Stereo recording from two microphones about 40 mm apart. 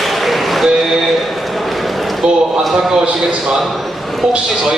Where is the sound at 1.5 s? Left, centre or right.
Centre.